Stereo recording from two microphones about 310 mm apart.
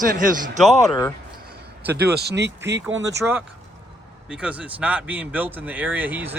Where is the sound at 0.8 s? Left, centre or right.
Centre.